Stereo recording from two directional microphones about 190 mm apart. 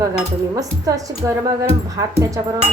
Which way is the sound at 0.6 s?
20° right (ahead or behind).